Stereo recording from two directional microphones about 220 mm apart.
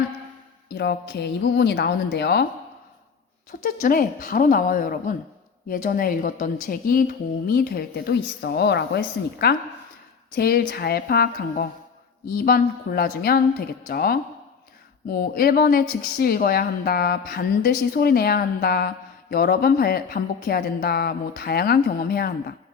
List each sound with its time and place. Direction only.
0.7 s a woman's voice: 50° left (ahead or behind)
3.6 s a woman's voice: 40° left (ahead or behind)